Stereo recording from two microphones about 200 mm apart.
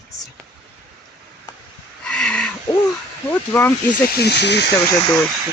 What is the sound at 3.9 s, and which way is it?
Speech, 55° left (ahead or behind).